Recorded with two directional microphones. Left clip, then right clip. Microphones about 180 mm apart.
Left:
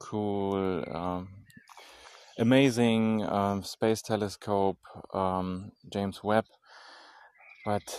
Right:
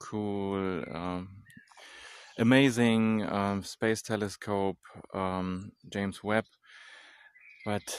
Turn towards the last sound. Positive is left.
turn(degrees=-15)  # may be behind; listen again after turning